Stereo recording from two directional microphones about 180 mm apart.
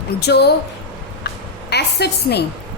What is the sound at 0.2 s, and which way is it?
Speech, 65° left (ahead or behind).